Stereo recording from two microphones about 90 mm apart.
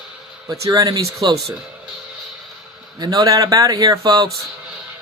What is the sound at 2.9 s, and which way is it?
A man's voice, 50° right (ahead or behind).